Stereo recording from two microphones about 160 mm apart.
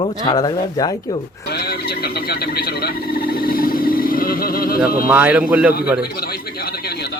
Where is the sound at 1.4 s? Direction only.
80° left; by 4.8 s 65° left (ahead or behind).